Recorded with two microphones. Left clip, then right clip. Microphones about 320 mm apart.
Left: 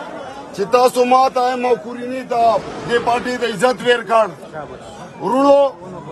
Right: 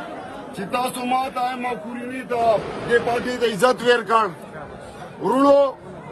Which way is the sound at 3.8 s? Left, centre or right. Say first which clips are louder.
Left 3 dB; centre.